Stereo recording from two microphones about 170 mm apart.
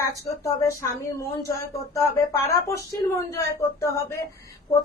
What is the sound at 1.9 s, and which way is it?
Speech, 20° left (ahead or behind).